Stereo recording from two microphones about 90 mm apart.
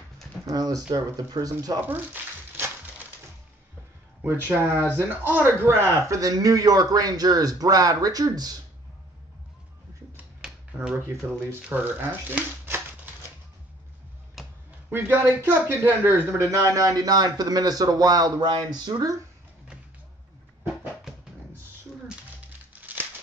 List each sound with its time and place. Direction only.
0.5 s a man's voice: 45° right (ahead or behind)
4.2 s a man's voice: 25° right (ahead or behind); by 8.5 s 45° right (ahead or behind)
10.4 s a sound: 10° right (ahead or behind)
11.0 s speech: 30° right (ahead or behind)
14.4 s a sound: centre (ahead or behind)
14.9 s a man's voice: 25° right (ahead or behind); by 19.1 s 50° right (ahead or behind)
22.7 s music: 20° right (ahead or behind)